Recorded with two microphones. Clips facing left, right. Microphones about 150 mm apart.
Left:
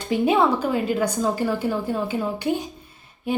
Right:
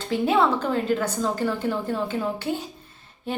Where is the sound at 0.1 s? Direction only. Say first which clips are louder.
Left 2 dB; 15° left (ahead or behind).